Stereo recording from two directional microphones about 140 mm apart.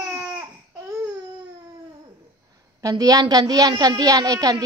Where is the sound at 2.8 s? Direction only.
25° right (ahead or behind).